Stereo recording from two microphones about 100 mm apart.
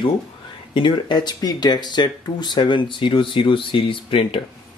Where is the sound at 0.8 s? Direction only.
50° left (ahead or behind).